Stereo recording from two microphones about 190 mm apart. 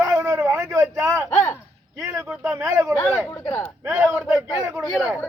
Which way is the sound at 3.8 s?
10° right (ahead or behind).